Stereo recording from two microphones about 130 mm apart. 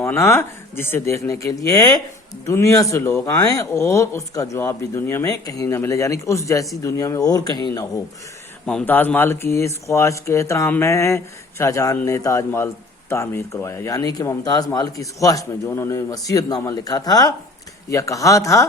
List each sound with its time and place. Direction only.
0.0 s speech: 20° left (ahead or behind)
8.6 s speech: 10° left (ahead or behind)